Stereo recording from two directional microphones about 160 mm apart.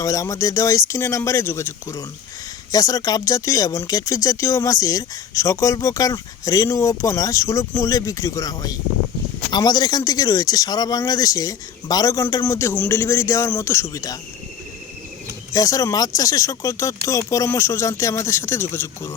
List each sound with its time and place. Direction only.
0.0 s speech: 20° left (ahead or behind)
15.5 s speech: 20° left (ahead or behind)